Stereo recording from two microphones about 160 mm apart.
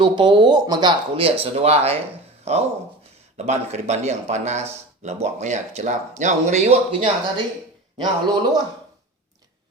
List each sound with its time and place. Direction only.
0.0 s speech: 30° right (ahead or behind)
3.3 s a man's voice: 45° right (ahead or behind); by 8.6 s 25° right (ahead or behind)